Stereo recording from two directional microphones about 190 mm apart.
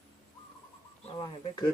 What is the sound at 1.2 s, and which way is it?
Speech, 20° left (ahead or behind).